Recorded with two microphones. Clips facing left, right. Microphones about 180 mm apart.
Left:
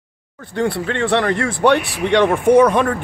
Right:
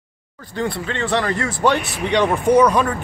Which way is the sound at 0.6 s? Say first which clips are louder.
Left 4 dB; 60° left (ahead or behind).